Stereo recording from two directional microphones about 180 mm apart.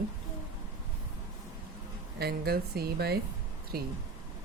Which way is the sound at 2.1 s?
60° right (ahead or behind).